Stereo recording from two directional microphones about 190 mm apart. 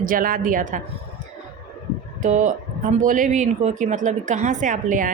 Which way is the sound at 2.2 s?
40° right (ahead or behind).